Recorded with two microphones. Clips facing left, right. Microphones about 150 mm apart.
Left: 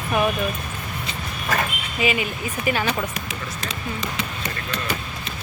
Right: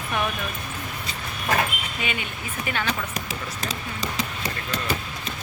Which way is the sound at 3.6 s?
35° right (ahead or behind).